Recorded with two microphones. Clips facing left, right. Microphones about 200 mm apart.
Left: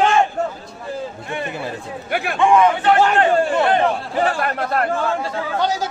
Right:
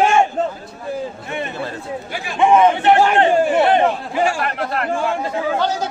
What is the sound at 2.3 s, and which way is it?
Speech, 20° right (ahead or behind).